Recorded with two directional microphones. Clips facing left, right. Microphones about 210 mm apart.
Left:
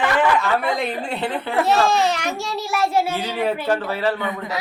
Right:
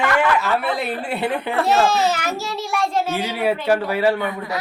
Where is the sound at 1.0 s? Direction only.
10° right (ahead or behind); by 3.2 s 10° left (ahead or behind).